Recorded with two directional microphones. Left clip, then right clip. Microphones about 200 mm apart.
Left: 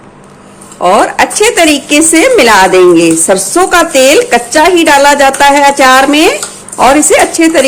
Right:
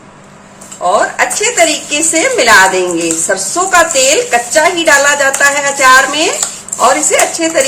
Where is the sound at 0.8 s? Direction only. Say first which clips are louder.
Left 4 dB; 45° left (ahead or behind).